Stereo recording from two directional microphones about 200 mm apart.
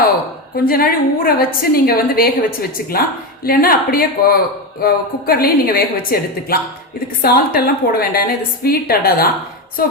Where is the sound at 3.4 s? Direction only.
45° left (ahead or behind).